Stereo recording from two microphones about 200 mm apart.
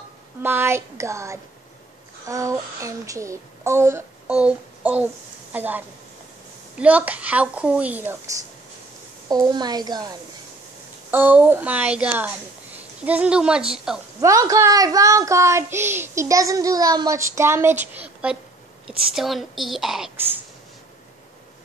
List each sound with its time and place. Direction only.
0.4 s a woman's voice: 10° right (ahead or behind)
9.3 s a woman's voice: 20° right (ahead or behind)
11.1 s a woman's voice: 10° right (ahead or behind)
14.2 s a woman's voice: 15° right (ahead or behind)